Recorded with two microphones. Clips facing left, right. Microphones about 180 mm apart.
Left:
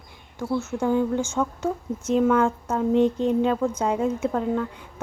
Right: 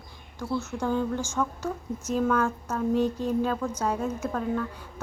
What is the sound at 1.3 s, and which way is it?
A woman's voice, 25° left (ahead or behind).